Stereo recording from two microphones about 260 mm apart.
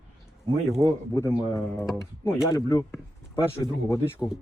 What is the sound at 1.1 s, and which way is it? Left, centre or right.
Speech, centre.